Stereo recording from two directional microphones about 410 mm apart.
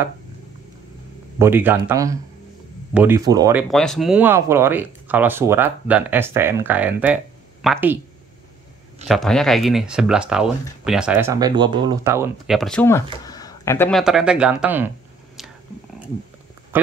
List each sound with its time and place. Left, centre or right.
1.4 s speech: centre
9.0 s speech: centre
15.4 s whispering: centre
16.7 s a sound: centre